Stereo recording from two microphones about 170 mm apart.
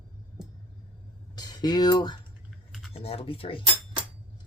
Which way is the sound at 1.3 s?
25° left (ahead or behind).